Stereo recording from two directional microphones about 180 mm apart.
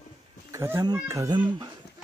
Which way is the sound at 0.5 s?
15° right (ahead or behind).